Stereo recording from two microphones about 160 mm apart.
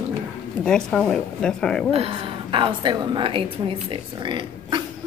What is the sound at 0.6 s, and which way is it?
A woman's voice, 5° left (ahead or behind).